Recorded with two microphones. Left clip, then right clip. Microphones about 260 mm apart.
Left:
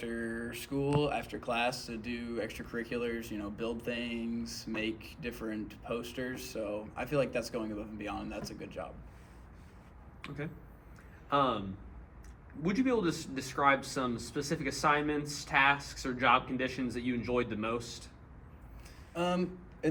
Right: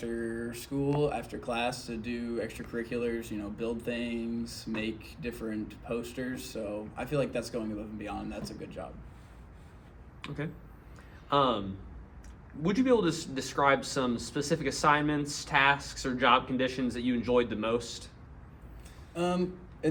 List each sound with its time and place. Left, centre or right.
0.0 s mantra: centre
1.5 s speech: centre
4.4 s a man's voice: right
4.7 s speech: centre
10.2 s a man's voice: right
12.6 s a man's voice: right
19.1 s a man's voice: centre